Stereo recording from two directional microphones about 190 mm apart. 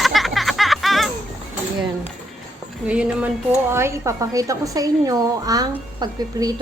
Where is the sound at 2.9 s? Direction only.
5° right (ahead or behind).